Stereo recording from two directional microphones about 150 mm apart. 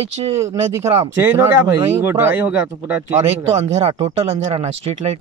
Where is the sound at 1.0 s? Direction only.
15° right (ahead or behind).